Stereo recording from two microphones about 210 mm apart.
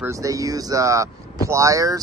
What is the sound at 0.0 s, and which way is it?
Speech, 15° right (ahead or behind).